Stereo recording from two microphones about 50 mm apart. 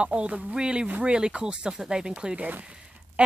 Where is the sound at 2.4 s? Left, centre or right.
Right.